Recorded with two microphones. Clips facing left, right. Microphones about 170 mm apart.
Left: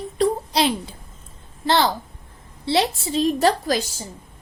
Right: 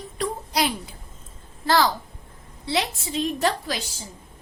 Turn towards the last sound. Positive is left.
turn(degrees=40)  # may be behind; listen again after turning